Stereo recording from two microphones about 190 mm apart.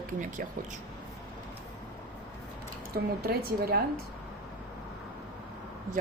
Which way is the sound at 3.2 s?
55° right (ahead or behind).